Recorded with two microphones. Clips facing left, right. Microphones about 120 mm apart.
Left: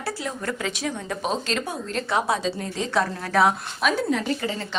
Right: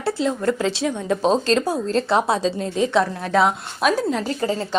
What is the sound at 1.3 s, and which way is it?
A woman's voice, 35° right (ahead or behind).